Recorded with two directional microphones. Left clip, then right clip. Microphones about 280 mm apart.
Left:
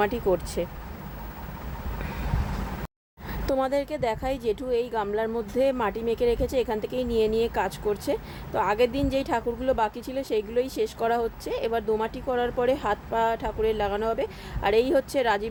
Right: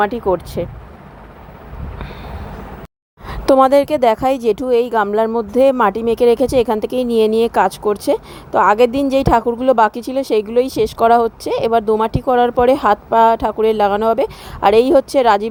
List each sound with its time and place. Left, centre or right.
0.0 s speech: centre
3.2 s speech: right